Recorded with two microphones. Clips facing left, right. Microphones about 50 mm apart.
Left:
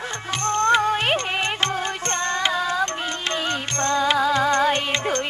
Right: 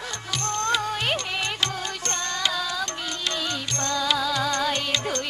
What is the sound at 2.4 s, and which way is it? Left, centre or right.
Music, left.